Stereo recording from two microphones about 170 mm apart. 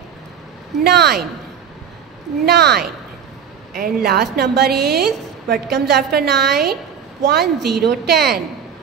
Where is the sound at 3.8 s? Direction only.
70° right (ahead or behind).